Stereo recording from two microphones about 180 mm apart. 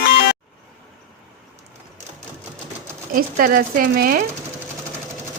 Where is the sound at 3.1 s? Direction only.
55° right (ahead or behind).